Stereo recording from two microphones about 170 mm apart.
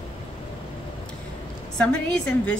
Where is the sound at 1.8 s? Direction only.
5° left (ahead or behind).